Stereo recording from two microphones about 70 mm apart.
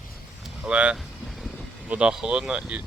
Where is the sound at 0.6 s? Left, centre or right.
Centre.